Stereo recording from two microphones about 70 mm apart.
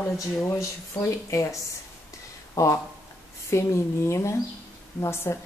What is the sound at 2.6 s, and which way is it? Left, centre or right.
Speech, left.